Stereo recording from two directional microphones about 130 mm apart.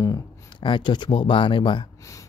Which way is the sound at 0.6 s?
40° left (ahead or behind).